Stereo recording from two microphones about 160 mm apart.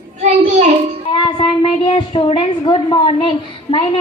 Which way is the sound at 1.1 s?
30° left (ahead or behind).